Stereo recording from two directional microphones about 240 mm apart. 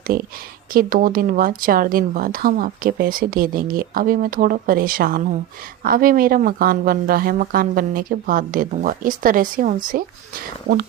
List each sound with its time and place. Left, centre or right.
0.1 s speech: right